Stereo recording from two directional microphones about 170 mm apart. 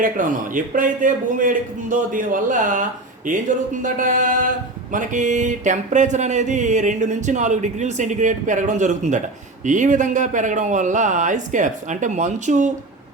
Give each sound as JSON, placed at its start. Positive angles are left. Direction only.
{"t": 0.0, "sound": "mantra", "side_deg": -50}